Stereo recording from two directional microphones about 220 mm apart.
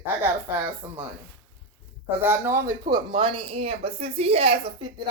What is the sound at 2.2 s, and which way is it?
Speech, 10° right (ahead or behind).